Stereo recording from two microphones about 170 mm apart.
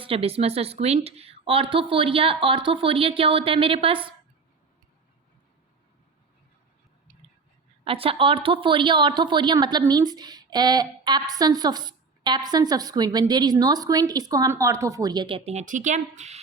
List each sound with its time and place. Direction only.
0.0 s a woman's voice: 35° right (ahead or behind)
7.9 s speech: 35° right (ahead or behind)